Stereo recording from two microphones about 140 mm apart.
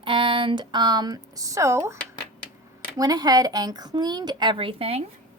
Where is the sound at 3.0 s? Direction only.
30° right (ahead or behind); by 5.0 s 45° right (ahead or behind).